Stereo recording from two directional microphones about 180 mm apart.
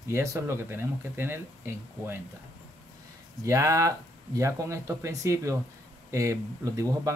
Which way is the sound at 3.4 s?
15° right (ahead or behind).